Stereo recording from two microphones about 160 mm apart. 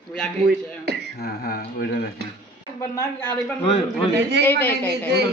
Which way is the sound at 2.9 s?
15° left (ahead or behind).